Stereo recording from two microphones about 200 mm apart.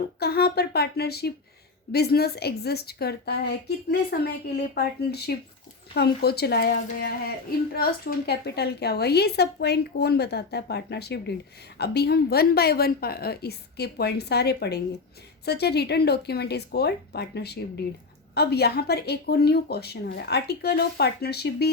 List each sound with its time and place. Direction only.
0.2 s a woman's voice: 55° left (ahead or behind)